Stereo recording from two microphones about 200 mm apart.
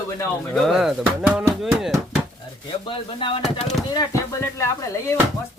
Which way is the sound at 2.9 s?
25° left (ahead or behind).